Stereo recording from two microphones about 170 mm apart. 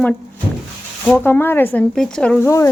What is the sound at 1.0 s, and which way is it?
Speech, 10° left (ahead or behind).